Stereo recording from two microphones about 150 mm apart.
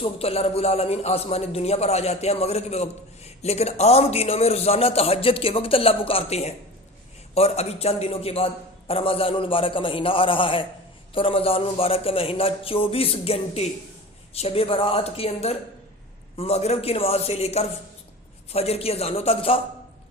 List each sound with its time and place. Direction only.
0.0 s a man's voice: 40° left (ahead or behind)